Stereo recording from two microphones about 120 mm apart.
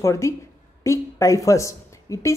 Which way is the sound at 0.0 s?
25° left (ahead or behind).